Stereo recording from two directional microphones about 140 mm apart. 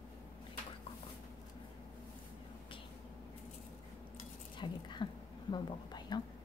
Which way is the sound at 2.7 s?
40° left (ahead or behind).